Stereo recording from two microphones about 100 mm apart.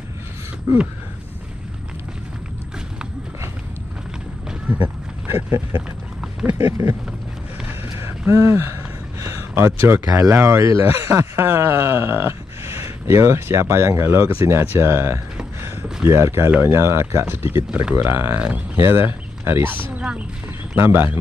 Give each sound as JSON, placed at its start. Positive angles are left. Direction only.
{"t": 4.5, "sound": "run", "side_deg": -15}
{"t": 5.2, "sound": "speech", "side_deg": -25}
{"t": 8.3, "sound": "speech", "side_deg": -25}
{"t": 15.6, "sound": "a sound", "side_deg": -25}
{"t": 16.6, "sound": "speech", "side_deg": -25}
{"t": 17.6, "sound": "speech", "side_deg": -10}
{"t": 17.9, "sound": "speech", "side_deg": -20}